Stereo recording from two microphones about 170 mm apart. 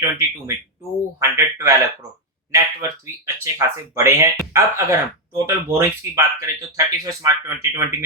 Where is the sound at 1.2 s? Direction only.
15° right (ahead or behind).